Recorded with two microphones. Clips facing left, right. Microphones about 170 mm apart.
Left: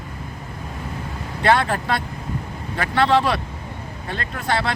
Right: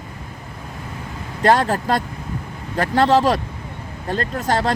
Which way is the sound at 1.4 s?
40° right (ahead or behind).